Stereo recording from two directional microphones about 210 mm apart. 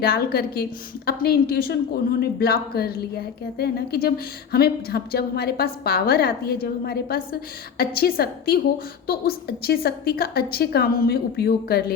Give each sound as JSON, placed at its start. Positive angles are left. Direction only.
{"t": 0.0, "sound": "a woman's voice", "side_deg": 45}